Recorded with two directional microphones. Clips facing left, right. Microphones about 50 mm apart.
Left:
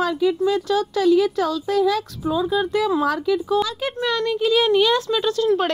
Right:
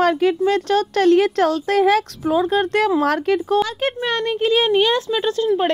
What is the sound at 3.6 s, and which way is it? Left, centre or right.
Speech, right.